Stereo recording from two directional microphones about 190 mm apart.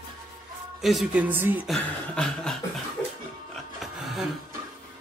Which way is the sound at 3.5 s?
Centre (ahead or behind).